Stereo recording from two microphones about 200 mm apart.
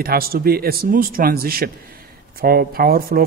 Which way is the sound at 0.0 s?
50° right (ahead or behind).